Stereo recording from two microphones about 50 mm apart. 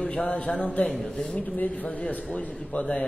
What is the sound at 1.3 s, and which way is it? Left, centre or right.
A man's voice, left.